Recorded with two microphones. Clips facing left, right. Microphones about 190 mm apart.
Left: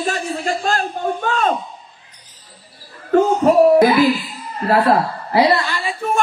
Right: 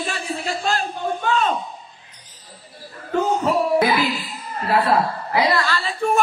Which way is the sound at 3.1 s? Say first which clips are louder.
Left 6 dB; 45° left (ahead or behind).